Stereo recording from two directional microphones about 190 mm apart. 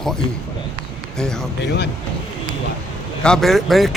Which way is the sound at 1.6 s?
65° left (ahead or behind).